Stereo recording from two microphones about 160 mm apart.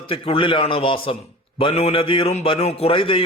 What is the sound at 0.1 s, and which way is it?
A man's voice, 35° left (ahead or behind).